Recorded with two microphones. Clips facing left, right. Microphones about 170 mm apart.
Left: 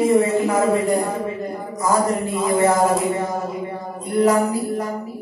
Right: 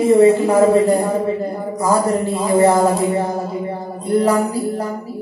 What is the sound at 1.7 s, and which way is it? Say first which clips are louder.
Speech: right 3 dB; 35° right (ahead or behind).